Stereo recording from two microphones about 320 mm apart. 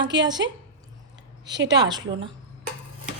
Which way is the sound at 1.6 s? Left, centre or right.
Centre.